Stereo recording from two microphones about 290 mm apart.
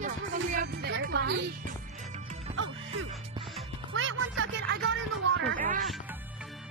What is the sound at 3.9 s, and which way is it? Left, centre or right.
Speech, right.